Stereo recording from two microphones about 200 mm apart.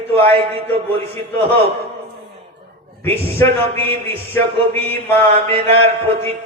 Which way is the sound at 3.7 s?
30° right (ahead or behind).